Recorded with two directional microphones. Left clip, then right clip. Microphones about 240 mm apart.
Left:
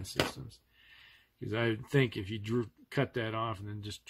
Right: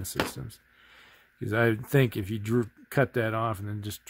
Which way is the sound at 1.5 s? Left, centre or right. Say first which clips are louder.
Right 7 dB; right.